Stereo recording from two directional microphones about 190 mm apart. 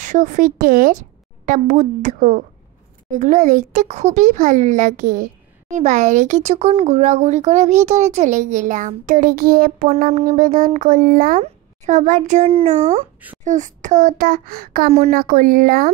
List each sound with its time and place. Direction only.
0.0 s a woman's voice: 40° right (ahead or behind)
14.9 s a child's voice: 35° right (ahead or behind)
15.1 s a child's voice: 45° right (ahead or behind)